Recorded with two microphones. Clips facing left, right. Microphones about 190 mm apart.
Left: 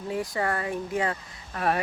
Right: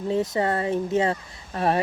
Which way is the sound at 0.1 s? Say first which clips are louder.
Right 5 dB; 25° right (ahead or behind).